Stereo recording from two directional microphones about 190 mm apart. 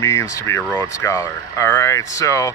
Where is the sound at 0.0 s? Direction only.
15° left (ahead or behind).